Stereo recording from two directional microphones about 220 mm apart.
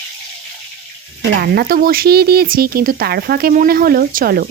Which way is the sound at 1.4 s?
45° right (ahead or behind).